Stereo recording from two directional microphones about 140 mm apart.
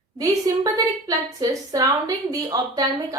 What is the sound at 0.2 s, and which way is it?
A woman's voice, 25° right (ahead or behind).